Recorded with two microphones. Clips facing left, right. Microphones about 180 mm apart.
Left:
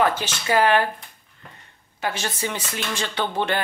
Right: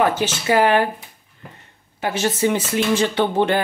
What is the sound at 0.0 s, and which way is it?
Speech, 10° right (ahead or behind).